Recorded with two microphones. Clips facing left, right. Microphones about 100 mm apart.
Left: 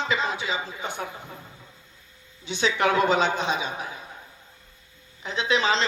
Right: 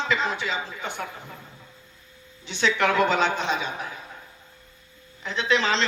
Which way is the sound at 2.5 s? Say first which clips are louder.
Even; 15° left (ahead or behind).